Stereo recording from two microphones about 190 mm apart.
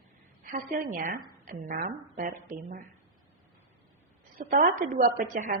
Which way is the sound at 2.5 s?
45° right (ahead or behind).